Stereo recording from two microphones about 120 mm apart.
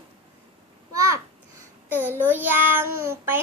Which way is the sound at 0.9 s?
25° right (ahead or behind).